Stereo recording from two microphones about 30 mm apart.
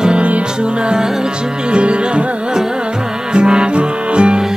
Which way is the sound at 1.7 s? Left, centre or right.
Right.